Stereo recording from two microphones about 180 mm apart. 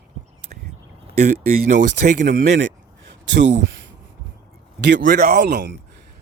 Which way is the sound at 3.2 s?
85° right.